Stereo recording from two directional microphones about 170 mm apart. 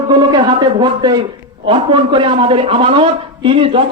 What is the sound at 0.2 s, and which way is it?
A man's voice, 25° right (ahead or behind).